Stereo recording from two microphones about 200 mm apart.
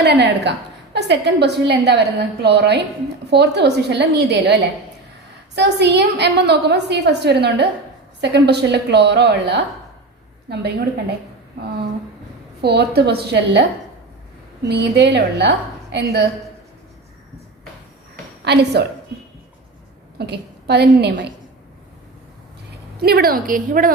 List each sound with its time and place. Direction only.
0.0 s a woman's voice: 55° right (ahead or behind)
12.6 s a woman's voice: 55° right (ahead or behind)
14.7 s a woman's voice: 55° right (ahead or behind)
18.4 s a woman's voice: 55° right (ahead or behind)
20.1 s a woman's voice: 55° right (ahead or behind)
23.0 s a woman's voice: 50° right (ahead or behind)